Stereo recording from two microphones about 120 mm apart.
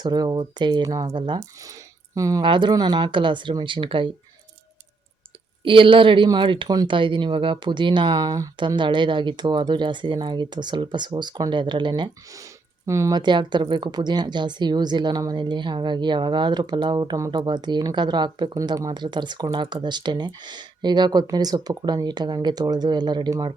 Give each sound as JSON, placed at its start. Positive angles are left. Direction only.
{"t": 0.0, "sound": "speech", "side_deg": -35}
{"t": 2.4, "sound": "speech", "side_deg": -40}
{"t": 5.6, "sound": "speech", "side_deg": -45}
{"t": 12.8, "sound": "speech", "side_deg": -25}
{"t": 13.1, "sound": "speech", "side_deg": -40}